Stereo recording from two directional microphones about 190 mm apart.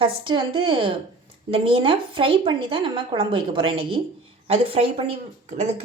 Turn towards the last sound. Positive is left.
turn(degrees=-35)  # may be behind; listen again after turning